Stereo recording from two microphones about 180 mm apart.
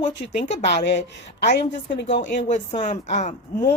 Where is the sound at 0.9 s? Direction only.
70° left (ahead or behind).